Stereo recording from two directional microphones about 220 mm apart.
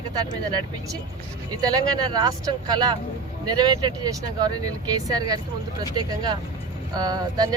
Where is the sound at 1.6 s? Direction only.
15° right (ahead or behind).